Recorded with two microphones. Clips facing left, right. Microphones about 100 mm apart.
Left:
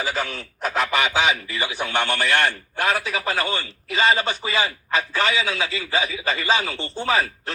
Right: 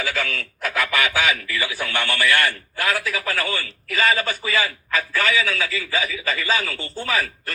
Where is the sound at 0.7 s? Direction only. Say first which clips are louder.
Left 1 dB; 20° left (ahead or behind).